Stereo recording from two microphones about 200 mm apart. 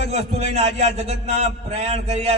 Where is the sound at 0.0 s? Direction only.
30° right (ahead or behind).